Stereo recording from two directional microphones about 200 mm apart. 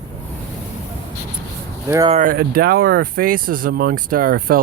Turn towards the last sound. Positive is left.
turn(degrees=-45)  # may be behind; listen again after turning